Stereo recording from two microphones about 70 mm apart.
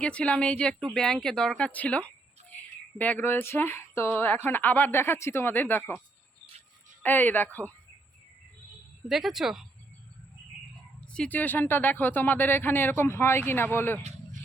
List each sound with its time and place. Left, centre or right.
0.0 s speech: centre
7.0 s speech: left
9.0 s speech: centre
11.0 s speech: centre; by 14.0 s left